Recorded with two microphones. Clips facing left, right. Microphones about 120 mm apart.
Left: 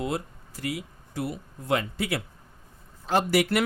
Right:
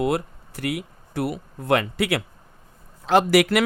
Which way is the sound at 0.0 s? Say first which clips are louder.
Right 7 dB; 65° right (ahead or behind).